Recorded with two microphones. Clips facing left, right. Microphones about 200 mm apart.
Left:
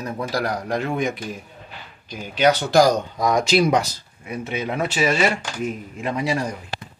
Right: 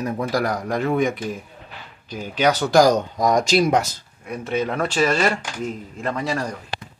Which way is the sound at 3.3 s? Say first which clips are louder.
Even; 5° left (ahead or behind).